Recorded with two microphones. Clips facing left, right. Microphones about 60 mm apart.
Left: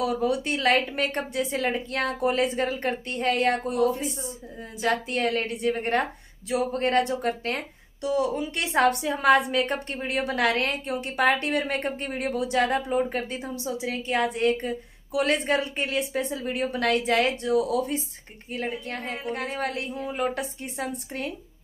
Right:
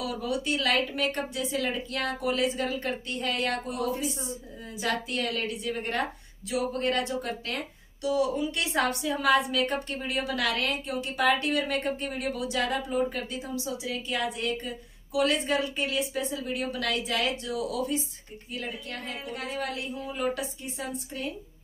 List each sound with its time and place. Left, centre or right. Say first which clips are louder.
0.0 s a woman's voice: left 6 dB; left